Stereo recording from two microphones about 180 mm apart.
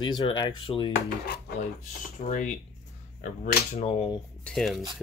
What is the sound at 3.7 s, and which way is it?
Speech, 30° left (ahead or behind).